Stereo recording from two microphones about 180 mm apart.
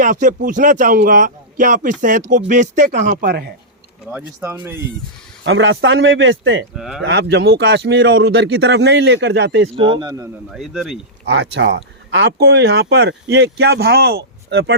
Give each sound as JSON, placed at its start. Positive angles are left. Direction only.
{"t": 0.0, "sound": "speech", "side_deg": -45}
{"t": 4.4, "sound": "speech", "side_deg": -15}
{"t": 5.4, "sound": "speech", "side_deg": -85}
{"t": 6.7, "sound": "speech", "side_deg": 0}
{"t": 7.0, "sound": "speech", "side_deg": -65}
{"t": 9.7, "sound": "speech", "side_deg": -25}
{"t": 10.5, "sound": "speech", "side_deg": 0}
{"t": 11.3, "sound": "speech", "side_deg": -85}